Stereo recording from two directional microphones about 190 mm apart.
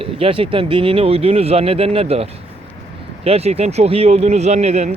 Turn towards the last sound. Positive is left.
turn(degrees=-35)  # may be behind; listen again after turning